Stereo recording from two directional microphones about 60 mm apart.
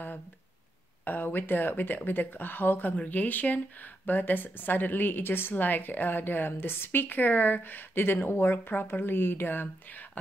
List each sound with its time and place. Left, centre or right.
1.0 s speech: left